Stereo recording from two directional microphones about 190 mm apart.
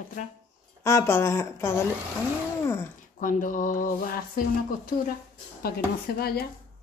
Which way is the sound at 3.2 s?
45° left (ahead or behind).